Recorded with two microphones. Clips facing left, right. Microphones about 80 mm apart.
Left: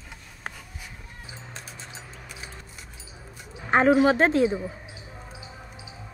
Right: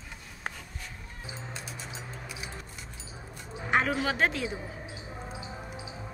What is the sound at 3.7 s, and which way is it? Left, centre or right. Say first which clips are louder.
Speech: left 9 dB; left.